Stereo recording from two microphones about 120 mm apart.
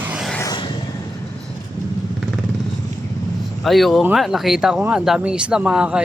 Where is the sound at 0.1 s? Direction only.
Centre (ahead or behind).